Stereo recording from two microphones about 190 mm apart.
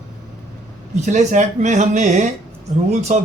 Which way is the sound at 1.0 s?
40° right (ahead or behind).